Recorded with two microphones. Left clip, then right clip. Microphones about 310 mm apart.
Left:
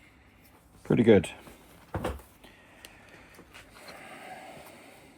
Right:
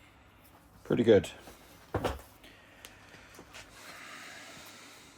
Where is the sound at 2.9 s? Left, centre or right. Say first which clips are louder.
Left 1 dB; left.